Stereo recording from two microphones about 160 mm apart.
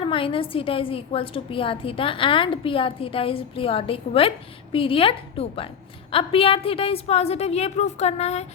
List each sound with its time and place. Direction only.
0.0 s a woman's voice: 35° left (ahead or behind)